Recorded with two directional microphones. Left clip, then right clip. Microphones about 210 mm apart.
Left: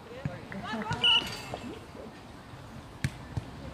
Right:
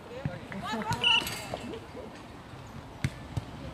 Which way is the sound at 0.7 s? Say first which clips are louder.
Even; 50° right (ahead or behind).